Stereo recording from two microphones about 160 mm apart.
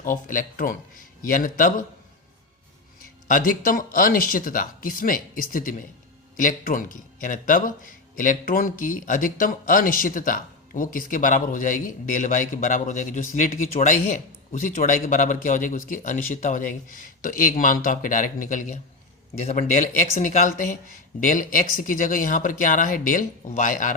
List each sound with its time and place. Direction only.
0.0 s a man's voice: 60° left (ahead or behind)
3.2 s a man's voice: 60° left (ahead or behind)
21.2 s a man's voice: 55° left (ahead or behind)